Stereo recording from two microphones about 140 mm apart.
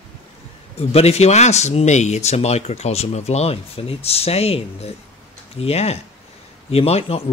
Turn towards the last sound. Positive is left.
turn(degrees=45)  # may be behind; listen again after turning